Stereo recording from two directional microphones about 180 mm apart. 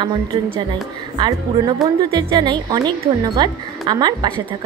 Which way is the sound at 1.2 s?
20° right (ahead or behind).